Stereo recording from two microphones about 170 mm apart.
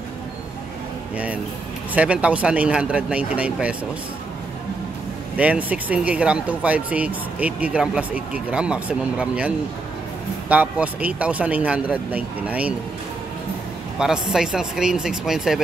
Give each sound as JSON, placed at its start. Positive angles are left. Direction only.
{"t": 1.1, "sound": "speech", "side_deg": -10}
{"t": 5.4, "sound": "speech", "side_deg": -10}
{"t": 10.5, "sound": "speech", "side_deg": -10}
{"t": 13.9, "sound": "speech", "side_deg": -5}